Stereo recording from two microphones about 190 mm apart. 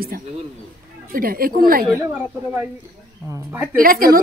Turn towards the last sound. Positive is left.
turn(degrees=-50)  # may be behind; listen again after turning